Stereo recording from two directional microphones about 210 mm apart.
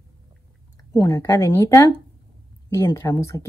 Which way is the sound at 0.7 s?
15° left (ahead or behind).